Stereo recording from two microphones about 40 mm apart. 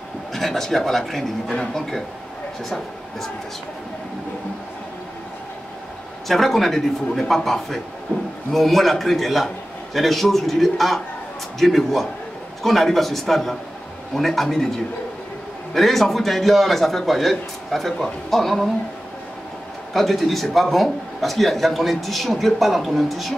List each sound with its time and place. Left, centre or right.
0.3 s speech: centre
1.5 s speech: centre
6.2 s speech: centre
8.1 s a sound: left
8.5 s a man's voice: centre
15.7 s a man's voice: centre
19.9 s a man's voice: centre